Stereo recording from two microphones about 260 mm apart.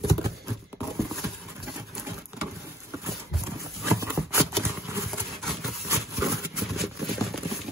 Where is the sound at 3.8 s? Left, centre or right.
Centre.